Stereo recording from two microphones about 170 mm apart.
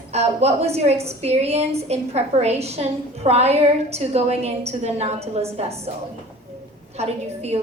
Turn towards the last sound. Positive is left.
turn(degrees=-40)  # may be behind; listen again after turning